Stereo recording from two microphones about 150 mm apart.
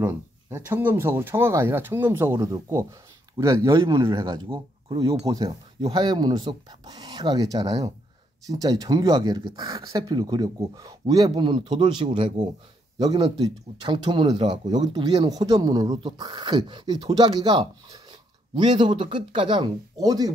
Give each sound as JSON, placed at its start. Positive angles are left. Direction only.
{"t": 0.0, "sound": "speech", "side_deg": -15}
{"t": 4.1, "sound": "speech", "side_deg": -30}
{"t": 5.3, "sound": "speech", "side_deg": -25}
{"t": 13.4, "sound": "speech", "side_deg": -30}